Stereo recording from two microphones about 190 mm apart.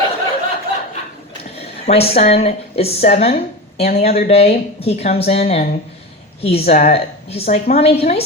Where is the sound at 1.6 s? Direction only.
30° left (ahead or behind).